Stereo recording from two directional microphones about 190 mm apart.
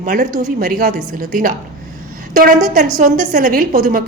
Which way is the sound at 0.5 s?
55° right (ahead or behind).